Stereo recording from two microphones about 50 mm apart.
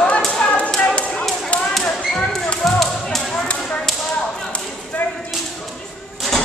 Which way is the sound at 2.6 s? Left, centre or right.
Centre.